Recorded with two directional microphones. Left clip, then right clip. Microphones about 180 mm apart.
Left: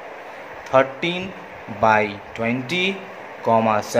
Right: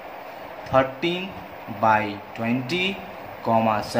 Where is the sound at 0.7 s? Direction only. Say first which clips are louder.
Left 3 dB; 20° left (ahead or behind).